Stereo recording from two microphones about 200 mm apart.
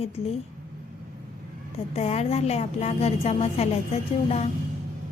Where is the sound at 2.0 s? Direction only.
35° left (ahead or behind).